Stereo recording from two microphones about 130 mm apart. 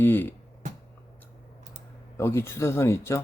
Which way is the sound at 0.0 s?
15° left (ahead or behind).